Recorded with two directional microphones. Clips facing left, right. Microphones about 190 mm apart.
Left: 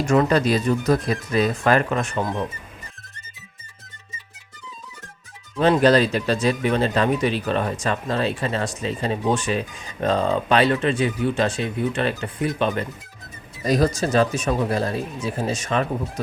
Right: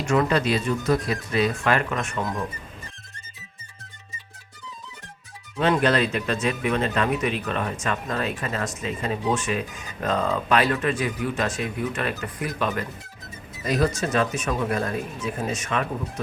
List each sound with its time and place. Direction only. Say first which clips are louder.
0.1 s speech: left 3 dB; 40° left (ahead or behind)
5.5 s speech: left 5 dB; 35° left (ahead or behind)
13.7 s speech: left 3 dB; 35° left (ahead or behind)